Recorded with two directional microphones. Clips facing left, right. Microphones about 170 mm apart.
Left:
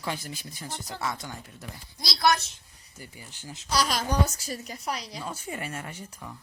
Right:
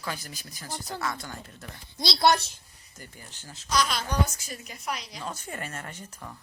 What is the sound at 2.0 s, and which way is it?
Speech, 25° right (ahead or behind).